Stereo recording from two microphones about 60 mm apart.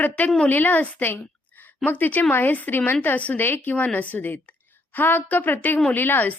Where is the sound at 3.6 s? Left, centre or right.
Left.